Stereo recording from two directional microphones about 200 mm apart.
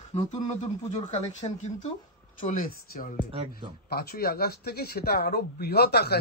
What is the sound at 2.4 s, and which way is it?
Speech, 40° left (ahead or behind).